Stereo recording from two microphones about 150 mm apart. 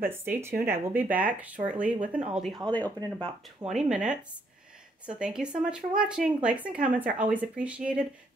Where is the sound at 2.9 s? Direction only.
25° right (ahead or behind).